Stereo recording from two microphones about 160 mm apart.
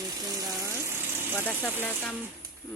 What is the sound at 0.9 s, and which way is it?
Vehicle, 15° right (ahead or behind).